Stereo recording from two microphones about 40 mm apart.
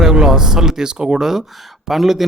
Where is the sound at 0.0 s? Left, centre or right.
Centre.